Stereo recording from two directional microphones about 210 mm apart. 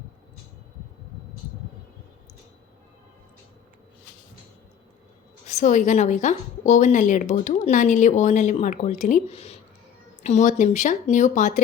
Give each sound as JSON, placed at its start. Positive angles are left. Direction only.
{"t": 5.5, "sound": "a woman's voice", "side_deg": 35}